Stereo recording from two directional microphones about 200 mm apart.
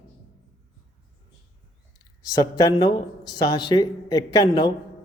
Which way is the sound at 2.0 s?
20° left (ahead or behind).